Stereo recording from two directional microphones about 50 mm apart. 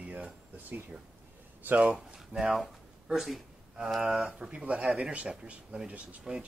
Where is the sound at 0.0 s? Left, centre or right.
Right.